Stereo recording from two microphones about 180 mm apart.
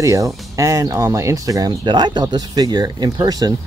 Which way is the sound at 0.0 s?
20° right (ahead or behind).